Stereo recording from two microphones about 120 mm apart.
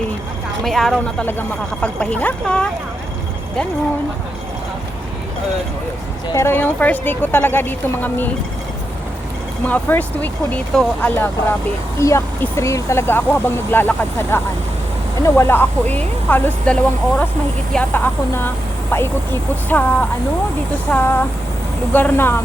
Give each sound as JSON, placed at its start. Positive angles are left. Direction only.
{"t": 0.6, "sound": "speech", "side_deg": 0}
{"t": 1.2, "sound": "speech", "side_deg": 15}
{"t": 6.3, "sound": "speech", "side_deg": 20}
{"t": 9.6, "sound": "speech", "side_deg": 15}
{"t": 11.9, "sound": "speech", "side_deg": 25}